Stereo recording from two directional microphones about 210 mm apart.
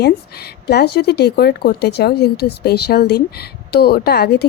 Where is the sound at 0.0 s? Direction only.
50° left (ahead or behind).